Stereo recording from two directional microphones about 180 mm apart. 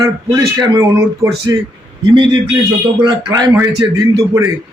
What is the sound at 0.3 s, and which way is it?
Speech, 15° right (ahead or behind).